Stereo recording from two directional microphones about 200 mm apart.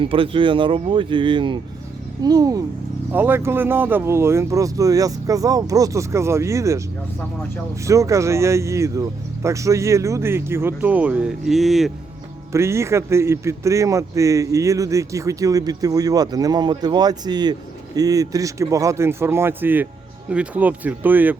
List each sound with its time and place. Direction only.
0.0 s a man's voice: 25° right (ahead or behind)
7.9 s a man's voice: 15° right (ahead or behind)
12.5 s a man's voice: 15° right (ahead or behind)